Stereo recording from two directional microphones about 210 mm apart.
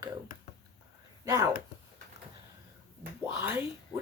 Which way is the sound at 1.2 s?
15° right (ahead or behind).